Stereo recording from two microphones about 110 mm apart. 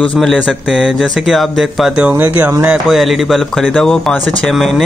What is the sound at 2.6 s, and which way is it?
Speech, 5° right (ahead or behind).